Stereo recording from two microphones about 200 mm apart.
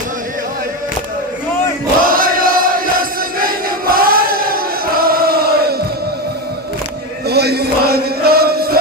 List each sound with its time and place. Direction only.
2.0 s crowd: 45° right (ahead or behind)
7.3 s music: 55° right (ahead or behind)